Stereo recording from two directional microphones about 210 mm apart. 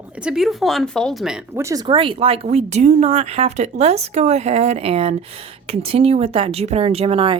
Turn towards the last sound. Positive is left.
turn(degrees=-25)  # may be behind; listen again after turning